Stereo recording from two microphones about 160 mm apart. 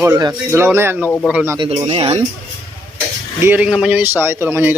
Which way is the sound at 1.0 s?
10° left (ahead or behind).